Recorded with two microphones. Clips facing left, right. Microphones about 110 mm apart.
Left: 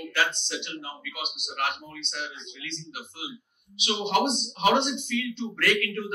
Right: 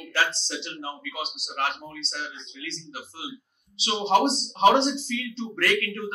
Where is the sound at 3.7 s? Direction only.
35° right (ahead or behind).